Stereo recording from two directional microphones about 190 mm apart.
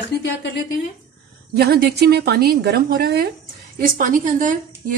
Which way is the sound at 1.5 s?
55° right (ahead or behind).